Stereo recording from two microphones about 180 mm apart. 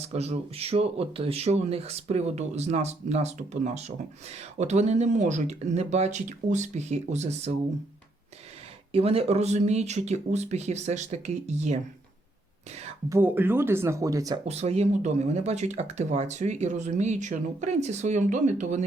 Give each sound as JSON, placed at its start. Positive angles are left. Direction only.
{"t": 0.0, "sound": "speech", "side_deg": -35}
{"t": 8.9, "sound": "speech", "side_deg": -35}
{"t": 13.1, "sound": "speech", "side_deg": -10}
{"t": 14.4, "sound": "speech", "side_deg": -35}